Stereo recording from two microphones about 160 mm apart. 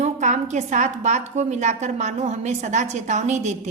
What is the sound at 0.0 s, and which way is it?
A woman's voice, 50° right (ahead or behind).